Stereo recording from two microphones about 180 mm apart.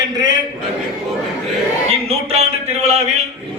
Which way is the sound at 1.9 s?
35° right (ahead or behind).